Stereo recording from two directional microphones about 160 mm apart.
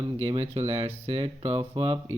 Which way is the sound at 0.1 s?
35° right (ahead or behind).